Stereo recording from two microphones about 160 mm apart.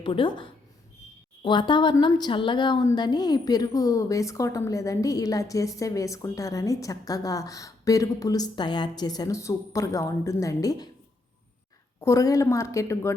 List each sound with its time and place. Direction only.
0.0 s a woman's voice: 30° left (ahead or behind)
11.9 s a woman's voice: 20° left (ahead or behind)